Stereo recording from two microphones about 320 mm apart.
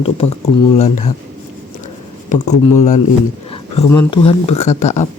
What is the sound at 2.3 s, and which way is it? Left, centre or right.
Speech, left.